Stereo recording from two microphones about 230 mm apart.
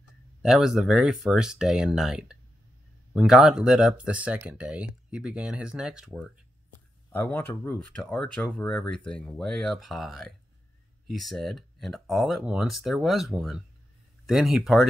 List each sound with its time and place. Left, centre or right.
0.4 s speech: centre
7.1 s speech: centre